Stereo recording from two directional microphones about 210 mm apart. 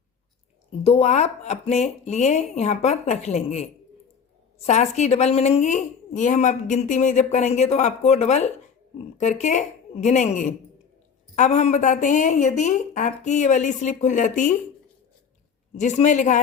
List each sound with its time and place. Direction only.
0.9 s a woman's voice: 30° left (ahead or behind)
15.7 s a woman's voice: 35° left (ahead or behind)